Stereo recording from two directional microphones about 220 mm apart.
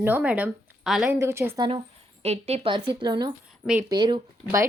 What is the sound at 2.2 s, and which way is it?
A woman's voice, 30° right (ahead or behind).